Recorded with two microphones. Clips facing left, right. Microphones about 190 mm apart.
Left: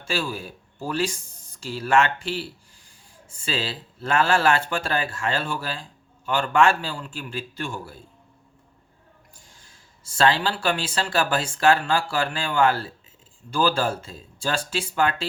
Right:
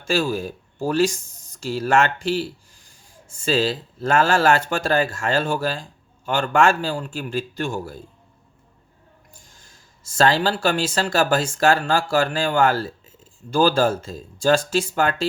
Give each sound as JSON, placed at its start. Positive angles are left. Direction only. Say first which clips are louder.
{"t": 0.0, "sound": "speech", "louder": "right 6 dB", "side_deg": -45}
{"t": 9.6, "sound": "speech", "louder": "right 2 dB", "side_deg": -45}